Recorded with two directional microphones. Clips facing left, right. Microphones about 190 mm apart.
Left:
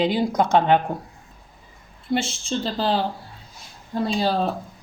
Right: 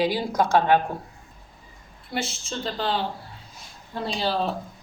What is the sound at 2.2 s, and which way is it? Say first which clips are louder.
Speech: left 1 dB; 30° left (ahead or behind).